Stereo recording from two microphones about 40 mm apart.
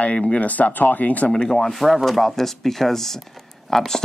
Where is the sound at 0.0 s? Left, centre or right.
Left.